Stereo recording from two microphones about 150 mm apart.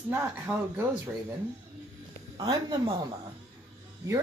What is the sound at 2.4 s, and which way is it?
Speech, 30° right (ahead or behind).